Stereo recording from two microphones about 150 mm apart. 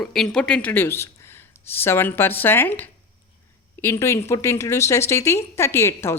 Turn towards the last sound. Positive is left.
turn(degrees=15)  # may be behind; listen again after turning